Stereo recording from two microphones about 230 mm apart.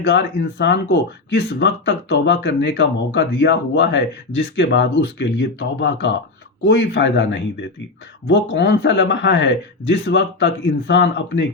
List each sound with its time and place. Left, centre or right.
0.0 s speech: left